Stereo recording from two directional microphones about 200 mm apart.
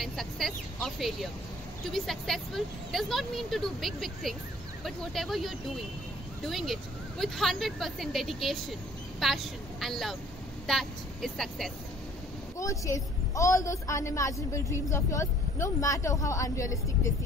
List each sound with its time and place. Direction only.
0.0 s a woman's voice: centre (ahead or behind)
12.5 s a woman's voice: 15° left (ahead or behind)